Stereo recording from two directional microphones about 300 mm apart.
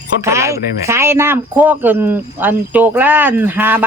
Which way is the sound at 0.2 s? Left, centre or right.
Centre.